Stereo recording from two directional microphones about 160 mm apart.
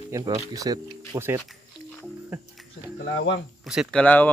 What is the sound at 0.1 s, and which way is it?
Speech, 20° right (ahead or behind).